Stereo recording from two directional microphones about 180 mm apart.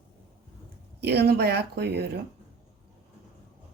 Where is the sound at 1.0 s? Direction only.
60° right (ahead or behind).